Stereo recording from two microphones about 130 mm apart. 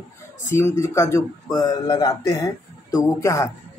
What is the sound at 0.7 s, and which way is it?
Speech, 20° left (ahead or behind).